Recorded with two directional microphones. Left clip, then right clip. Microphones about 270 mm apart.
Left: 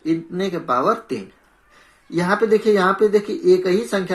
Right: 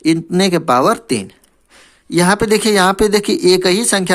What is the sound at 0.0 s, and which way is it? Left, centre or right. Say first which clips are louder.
Speech: right 8 dB; right.